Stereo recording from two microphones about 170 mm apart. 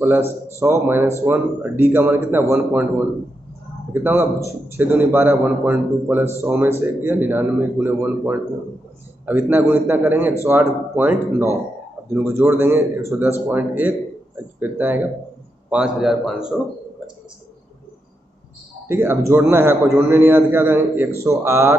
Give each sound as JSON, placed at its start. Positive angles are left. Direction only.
{"t": 0.0, "sound": "a man's voice", "side_deg": -10}
{"t": 3.9, "sound": "a man's voice", "side_deg": -10}
{"t": 18.9, "sound": "a man's voice", "side_deg": -15}